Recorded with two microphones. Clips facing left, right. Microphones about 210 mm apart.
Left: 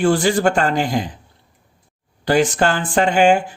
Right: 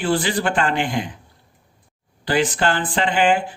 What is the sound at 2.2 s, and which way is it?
Speech, 45° left (ahead or behind).